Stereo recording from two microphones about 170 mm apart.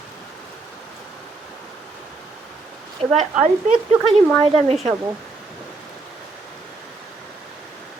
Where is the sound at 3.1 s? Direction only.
45° right (ahead or behind).